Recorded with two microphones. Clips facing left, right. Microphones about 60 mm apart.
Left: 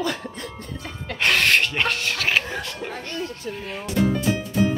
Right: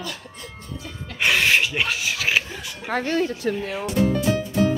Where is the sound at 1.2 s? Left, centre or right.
Centre.